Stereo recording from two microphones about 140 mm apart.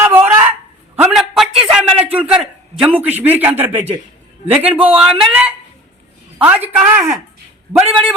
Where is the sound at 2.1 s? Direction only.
5° right (ahead or behind).